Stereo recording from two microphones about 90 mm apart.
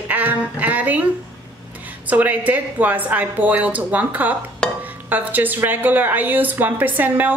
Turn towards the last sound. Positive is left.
turn(degrees=-20)  # may be behind; listen again after turning